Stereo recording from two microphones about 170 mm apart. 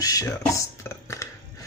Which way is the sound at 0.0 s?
20° left (ahead or behind).